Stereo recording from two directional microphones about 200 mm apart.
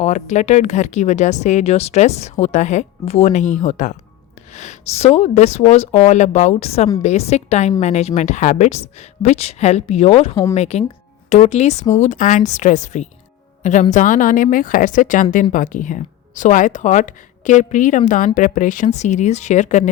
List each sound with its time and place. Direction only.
0.0 s speech: 35° left (ahead or behind)